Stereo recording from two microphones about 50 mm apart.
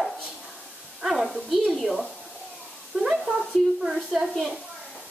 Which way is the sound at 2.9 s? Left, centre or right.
Centre.